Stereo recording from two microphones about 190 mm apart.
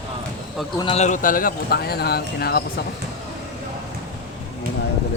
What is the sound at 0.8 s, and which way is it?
Speech, 35° left (ahead or behind).